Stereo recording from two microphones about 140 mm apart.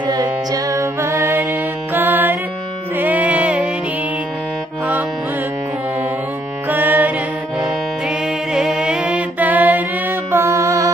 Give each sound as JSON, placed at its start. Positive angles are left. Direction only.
{"t": 0.0, "sound": "music", "side_deg": -30}
{"t": 6.7, "sound": "music", "side_deg": -15}
{"t": 8.5, "sound": "music", "side_deg": -5}